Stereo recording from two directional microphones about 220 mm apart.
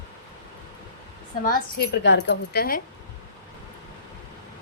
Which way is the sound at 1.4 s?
40° left (ahead or behind).